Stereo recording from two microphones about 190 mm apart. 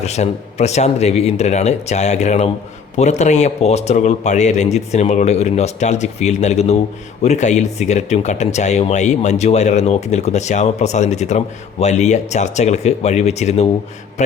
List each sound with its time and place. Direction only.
0.0 s speech: 35° left (ahead or behind)